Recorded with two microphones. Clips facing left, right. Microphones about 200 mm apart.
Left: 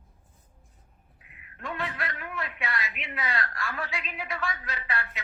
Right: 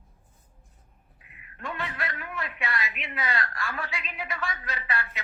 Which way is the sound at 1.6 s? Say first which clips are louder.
Even; centre (ahead or behind).